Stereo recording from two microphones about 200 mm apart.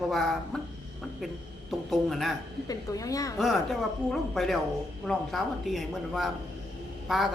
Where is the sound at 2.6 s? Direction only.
15° left (ahead or behind).